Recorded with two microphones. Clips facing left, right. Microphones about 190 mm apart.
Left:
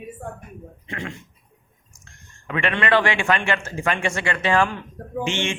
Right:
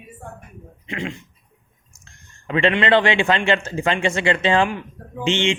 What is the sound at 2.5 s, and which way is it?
Speech, 25° right (ahead or behind).